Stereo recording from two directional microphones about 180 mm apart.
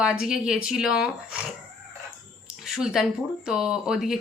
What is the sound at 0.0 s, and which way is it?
Speech, 5° right (ahead or behind).